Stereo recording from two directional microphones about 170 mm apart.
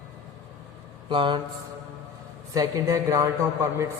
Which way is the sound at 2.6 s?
20° right (ahead or behind).